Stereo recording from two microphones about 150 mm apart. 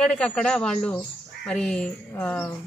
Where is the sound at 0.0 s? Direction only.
5° left (ahead or behind).